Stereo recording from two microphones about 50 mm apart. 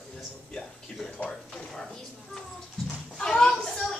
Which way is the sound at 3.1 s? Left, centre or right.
Centre.